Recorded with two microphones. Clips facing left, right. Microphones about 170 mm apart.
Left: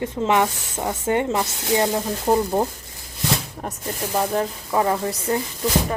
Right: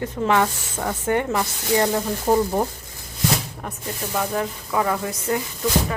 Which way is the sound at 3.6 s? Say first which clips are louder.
Left 2 dB; 30° left (ahead or behind).